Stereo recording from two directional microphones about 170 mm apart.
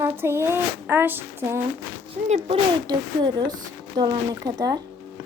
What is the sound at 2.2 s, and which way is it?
Speech, 40° right (ahead or behind).